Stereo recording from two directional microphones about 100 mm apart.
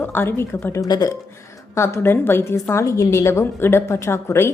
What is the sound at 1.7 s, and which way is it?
A woman's voice, 25° left (ahead or behind).